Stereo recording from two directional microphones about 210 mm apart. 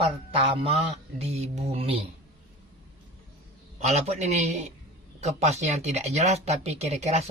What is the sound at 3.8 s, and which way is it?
Speech, 30° right (ahead or behind).